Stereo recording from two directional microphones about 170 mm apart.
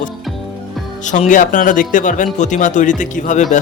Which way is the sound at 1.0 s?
45° left (ahead or behind).